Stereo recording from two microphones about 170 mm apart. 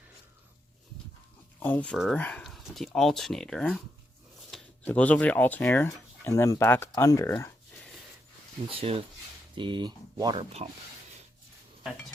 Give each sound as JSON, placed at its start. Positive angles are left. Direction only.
{"t": 1.5, "sound": "speech", "side_deg": 10}
{"t": 4.9, "sound": "speech", "side_deg": 10}
{"t": 7.8, "sound": "a sound", "side_deg": 0}
{"t": 8.7, "sound": "speech", "side_deg": -35}